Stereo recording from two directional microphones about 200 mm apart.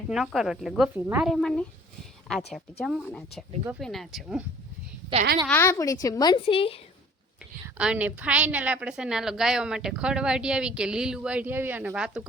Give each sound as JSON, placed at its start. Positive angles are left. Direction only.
{"t": 0.1, "sound": "a woman's voice", "side_deg": 0}
{"t": 2.8, "sound": "a woman's voice", "side_deg": 0}
{"t": 5.5, "sound": "a woman's voice", "side_deg": 10}
{"t": 7.8, "sound": "a woman's voice", "side_deg": -5}